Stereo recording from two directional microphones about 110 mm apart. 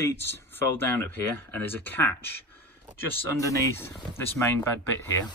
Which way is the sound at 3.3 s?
30° left (ahead or behind).